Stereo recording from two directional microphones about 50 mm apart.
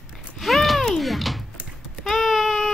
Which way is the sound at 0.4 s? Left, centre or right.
Centre.